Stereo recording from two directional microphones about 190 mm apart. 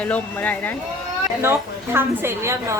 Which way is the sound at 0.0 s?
10° left (ahead or behind).